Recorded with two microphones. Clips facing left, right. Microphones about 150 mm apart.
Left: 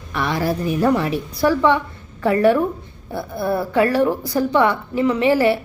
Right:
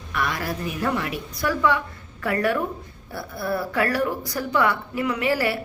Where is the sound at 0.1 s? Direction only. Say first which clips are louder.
Left 6 dB; 30° left (ahead or behind).